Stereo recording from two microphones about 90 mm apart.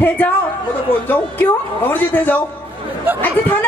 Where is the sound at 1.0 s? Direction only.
15° left (ahead or behind).